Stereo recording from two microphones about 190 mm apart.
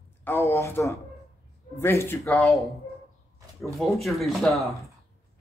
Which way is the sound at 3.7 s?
Centre (ahead or behind).